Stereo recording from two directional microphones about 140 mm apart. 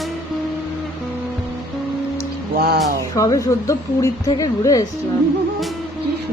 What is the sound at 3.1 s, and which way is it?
A woman's voice, 25° left (ahead or behind).